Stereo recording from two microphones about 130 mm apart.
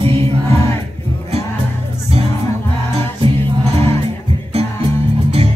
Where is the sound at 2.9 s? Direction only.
45° right (ahead or behind).